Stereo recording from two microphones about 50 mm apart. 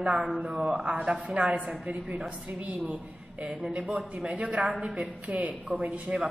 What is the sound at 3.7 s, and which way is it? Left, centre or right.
A woman's voice, centre.